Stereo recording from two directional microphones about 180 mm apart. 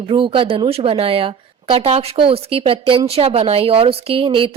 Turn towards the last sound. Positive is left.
turn(degrees=-30)  # may be behind; listen again after turning